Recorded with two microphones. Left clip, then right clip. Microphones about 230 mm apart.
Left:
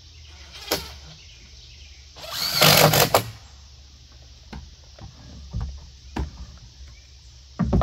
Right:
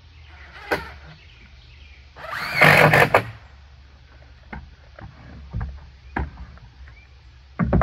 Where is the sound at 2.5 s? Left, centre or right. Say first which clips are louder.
Right 3 dB; centre.